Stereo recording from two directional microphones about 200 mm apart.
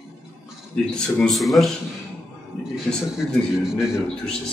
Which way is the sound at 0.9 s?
5° left (ahead or behind).